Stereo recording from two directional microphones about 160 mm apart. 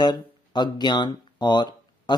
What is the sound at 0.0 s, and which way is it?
Speech, 25° left (ahead or behind).